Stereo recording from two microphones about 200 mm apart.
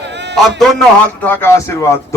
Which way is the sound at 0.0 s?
60° right (ahead or behind).